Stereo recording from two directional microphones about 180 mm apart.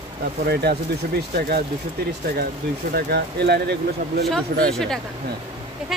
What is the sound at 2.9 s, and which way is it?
Speech, 65° right (ahead or behind).